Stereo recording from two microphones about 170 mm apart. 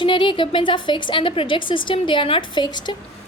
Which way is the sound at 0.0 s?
30° left (ahead or behind).